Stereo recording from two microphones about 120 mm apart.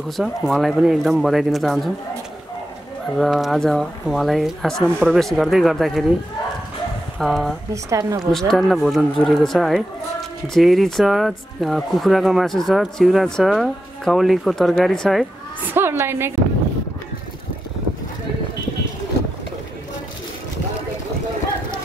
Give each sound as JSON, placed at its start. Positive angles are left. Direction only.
{"t": 0.2, "sound": "speech", "side_deg": 0}
{"t": 3.2, "sound": "speech", "side_deg": 0}
{"t": 7.2, "sound": "speech", "side_deg": 0}
{"t": 7.7, "sound": "a woman's voice", "side_deg": -25}
{"t": 8.2, "sound": "speech", "side_deg": 5}
{"t": 15.7, "sound": "a woman's voice", "side_deg": -20}